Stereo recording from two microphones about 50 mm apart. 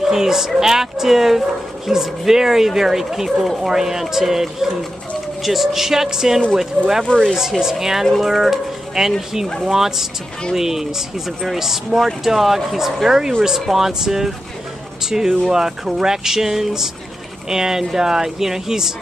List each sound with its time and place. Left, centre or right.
0.0 s speech: centre
7.1 s speech: centre
7.6 s speech: centre